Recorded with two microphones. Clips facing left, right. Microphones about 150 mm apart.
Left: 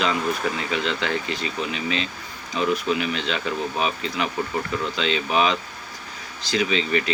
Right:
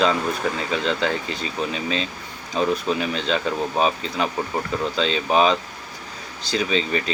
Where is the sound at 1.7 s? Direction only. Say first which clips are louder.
Right 1 dB; 35° right (ahead or behind).